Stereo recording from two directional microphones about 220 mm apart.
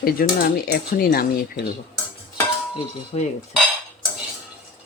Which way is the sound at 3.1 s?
30° left (ahead or behind).